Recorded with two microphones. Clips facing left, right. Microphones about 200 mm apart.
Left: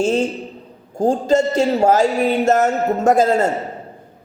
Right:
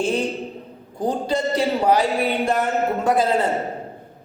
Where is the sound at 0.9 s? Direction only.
45° left (ahead or behind).